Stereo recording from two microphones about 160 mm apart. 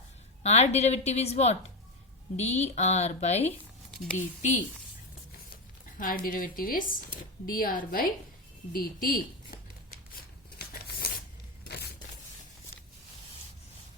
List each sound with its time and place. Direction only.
0.4 s speech: 45° left (ahead or behind)
6.0 s speech: 60° left (ahead or behind)
10.2 s a sound: 75° left (ahead or behind)